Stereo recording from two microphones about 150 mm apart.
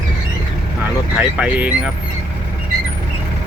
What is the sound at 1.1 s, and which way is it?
Speech, 10° right (ahead or behind).